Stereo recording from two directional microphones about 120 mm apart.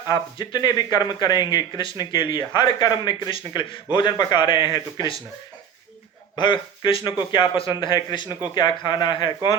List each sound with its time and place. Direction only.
0.1 s speech: 35° left (ahead or behind)
6.3 s speech: 40° left (ahead or behind)